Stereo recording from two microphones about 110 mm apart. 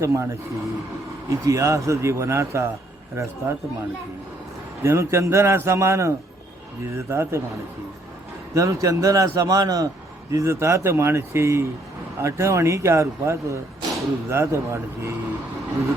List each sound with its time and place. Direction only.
0.0 s speech: 25° right (ahead or behind)
4.8 s speech: 25° right (ahead or behind)
8.5 s a man's voice: 30° right (ahead or behind)